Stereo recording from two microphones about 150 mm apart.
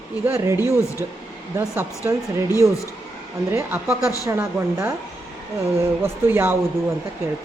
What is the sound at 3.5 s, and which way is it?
Speech, 20° right (ahead or behind).